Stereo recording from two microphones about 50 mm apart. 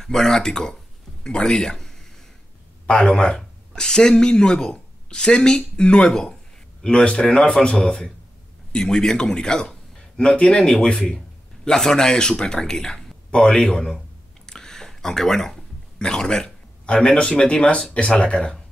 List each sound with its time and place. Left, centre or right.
0.0 s a man's voice: centre
14.4 s a sound: centre
17.9 s speech: centre